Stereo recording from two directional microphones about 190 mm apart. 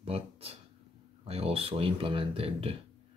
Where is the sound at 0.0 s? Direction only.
30° right (ahead or behind).